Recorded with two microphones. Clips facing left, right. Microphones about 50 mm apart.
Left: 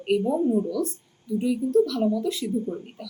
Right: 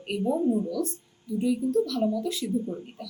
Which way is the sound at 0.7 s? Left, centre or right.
Centre.